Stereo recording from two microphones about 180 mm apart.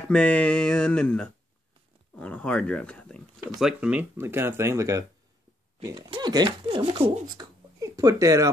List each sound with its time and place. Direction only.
0.1 s speech: 5° left (ahead or behind); by 8.5 s 15° right (ahead or behind)